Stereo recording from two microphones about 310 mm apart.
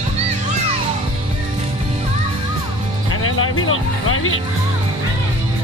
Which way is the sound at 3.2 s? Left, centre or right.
Left.